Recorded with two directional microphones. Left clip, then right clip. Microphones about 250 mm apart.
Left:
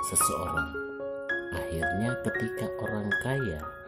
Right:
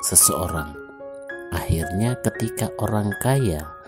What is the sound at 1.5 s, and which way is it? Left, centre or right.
Speech, right.